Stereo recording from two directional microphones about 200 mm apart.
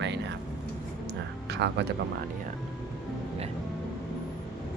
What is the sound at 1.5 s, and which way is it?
Speech, 55° right (ahead or behind).